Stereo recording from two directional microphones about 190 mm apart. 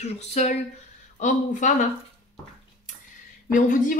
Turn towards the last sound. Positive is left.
turn(degrees=45)  # may be behind; listen again after turning